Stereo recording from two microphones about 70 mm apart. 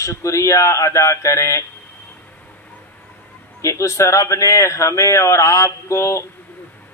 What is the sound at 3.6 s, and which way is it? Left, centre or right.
Speech, left.